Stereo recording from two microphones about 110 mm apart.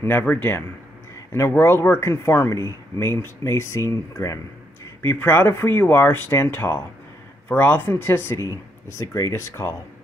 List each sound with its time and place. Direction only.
0.0 s speech: 15° left (ahead or behind)
5.0 s speech: 15° left (ahead or behind)